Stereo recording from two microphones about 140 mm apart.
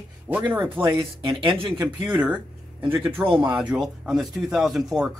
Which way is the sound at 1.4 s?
35° right (ahead or behind).